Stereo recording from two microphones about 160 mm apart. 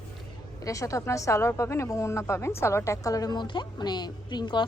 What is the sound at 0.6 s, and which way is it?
A woman's voice, 20° left (ahead or behind).